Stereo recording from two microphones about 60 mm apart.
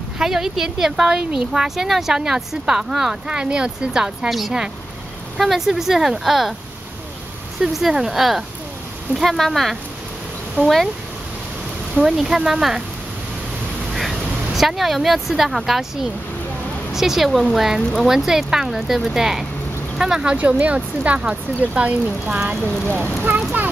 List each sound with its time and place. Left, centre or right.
0.2 s speech: centre
4.3 s speech: centre
7.6 s speech: centre
11.9 s speech: centre
13.9 s speech: centre
20.3 s speech: right
22.7 s speech: centre